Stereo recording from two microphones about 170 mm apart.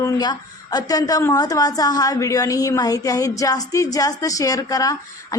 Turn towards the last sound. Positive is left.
turn(degrees=20)  # may be behind; listen again after turning